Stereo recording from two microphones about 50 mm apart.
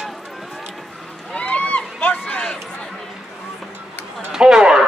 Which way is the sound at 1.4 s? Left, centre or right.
Left.